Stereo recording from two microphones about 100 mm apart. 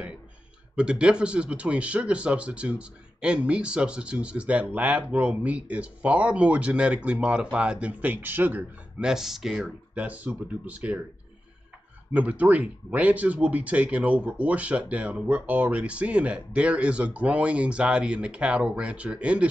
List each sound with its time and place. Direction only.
0.7 s speech: 10° right (ahead or behind)
9.0 s speech: 5° right (ahead or behind)
9.9 s speech: 15° right (ahead or behind)
12.1 s speech: 15° right (ahead or behind)